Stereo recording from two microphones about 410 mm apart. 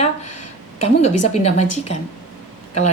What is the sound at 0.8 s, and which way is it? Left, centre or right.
Speech, centre.